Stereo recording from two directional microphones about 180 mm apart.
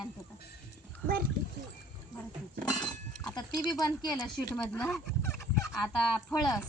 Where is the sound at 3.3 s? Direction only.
20° left (ahead or behind).